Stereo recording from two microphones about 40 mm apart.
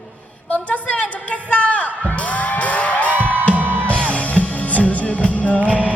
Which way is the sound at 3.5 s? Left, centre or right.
Right.